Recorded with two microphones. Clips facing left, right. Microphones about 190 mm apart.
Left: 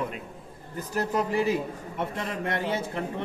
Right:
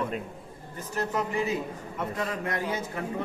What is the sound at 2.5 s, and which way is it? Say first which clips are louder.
Speech: left 4 dB; 30° left (ahead or behind).